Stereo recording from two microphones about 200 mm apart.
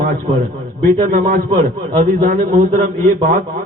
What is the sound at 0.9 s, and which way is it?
A man's voice, 40° right (ahead or behind).